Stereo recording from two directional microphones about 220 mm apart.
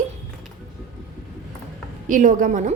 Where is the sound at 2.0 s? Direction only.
35° right (ahead or behind).